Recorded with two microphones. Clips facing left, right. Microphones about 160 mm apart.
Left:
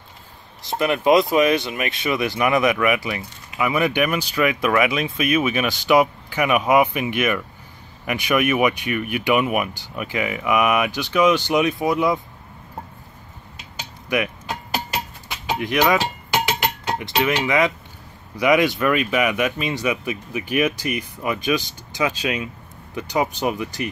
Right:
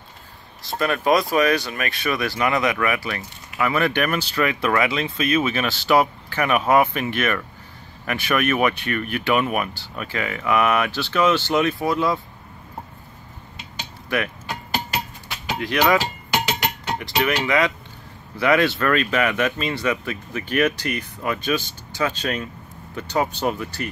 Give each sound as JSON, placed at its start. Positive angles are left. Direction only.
{"t": 0.7, "sound": "speech", "side_deg": 20}
{"t": 14.0, "sound": "a sound", "side_deg": 15}
{"t": 17.0, "sound": "speech", "side_deg": 20}